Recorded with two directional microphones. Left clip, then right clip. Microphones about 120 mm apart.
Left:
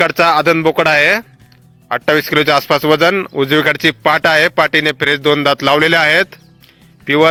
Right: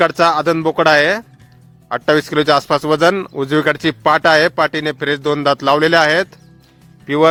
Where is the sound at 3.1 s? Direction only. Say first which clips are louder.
Left 4 dB; centre (ahead or behind).